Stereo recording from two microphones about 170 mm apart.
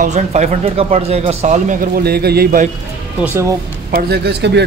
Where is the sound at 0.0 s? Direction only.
45° right (ahead or behind); by 2.7 s 60° right (ahead or behind).